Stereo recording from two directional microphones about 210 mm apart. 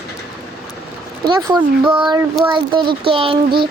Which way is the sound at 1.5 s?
20° right (ahead or behind).